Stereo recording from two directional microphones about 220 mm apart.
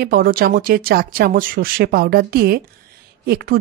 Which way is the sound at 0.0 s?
45° right (ahead or behind).